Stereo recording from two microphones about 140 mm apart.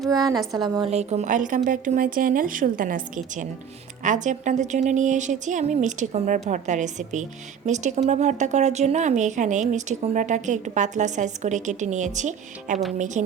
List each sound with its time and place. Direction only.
0.1 s a woman's voice: 25° right (ahead or behind)
0.9 s speech: 50° right (ahead or behind); by 3.4 s 75° right (ahead or behind)
4.0 s speech: 65° right (ahead or behind)